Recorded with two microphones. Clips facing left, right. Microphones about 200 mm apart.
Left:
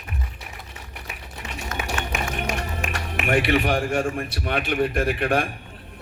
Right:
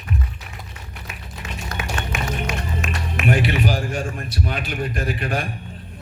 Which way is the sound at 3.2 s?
55° left (ahead or behind).